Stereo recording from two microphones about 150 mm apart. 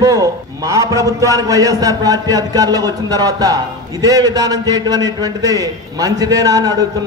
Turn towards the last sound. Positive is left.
turn(degrees=-25)  # may be behind; listen again after turning